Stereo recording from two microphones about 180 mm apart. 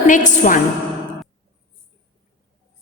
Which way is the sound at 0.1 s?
45° left (ahead or behind).